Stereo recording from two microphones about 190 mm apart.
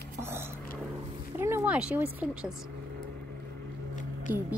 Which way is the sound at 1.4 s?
10° right (ahead or behind).